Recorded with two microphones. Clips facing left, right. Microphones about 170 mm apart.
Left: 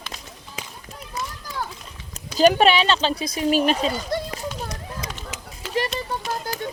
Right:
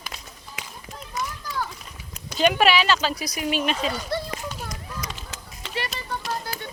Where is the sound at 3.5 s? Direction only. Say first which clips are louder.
Left 5 dB; 40° left (ahead or behind).